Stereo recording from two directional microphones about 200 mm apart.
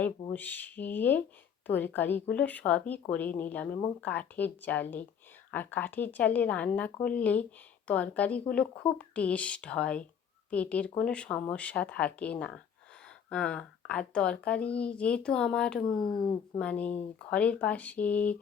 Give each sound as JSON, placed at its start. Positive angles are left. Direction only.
{"t": 0.3, "sound": "speech", "side_deg": 10}
{"t": 16.0, "sound": "speech", "side_deg": 20}
{"t": 16.6, "sound": "speech", "side_deg": 5}